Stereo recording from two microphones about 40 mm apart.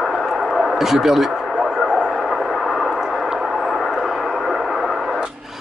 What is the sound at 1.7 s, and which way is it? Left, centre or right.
Vehicle, centre.